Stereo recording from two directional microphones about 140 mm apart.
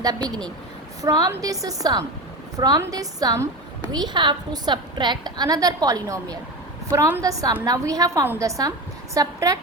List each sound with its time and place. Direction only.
0.0 s a woman's voice: 30° right (ahead or behind)